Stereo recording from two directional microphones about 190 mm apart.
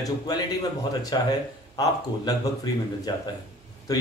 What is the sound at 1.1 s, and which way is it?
A man's voice, 20° left (ahead or behind).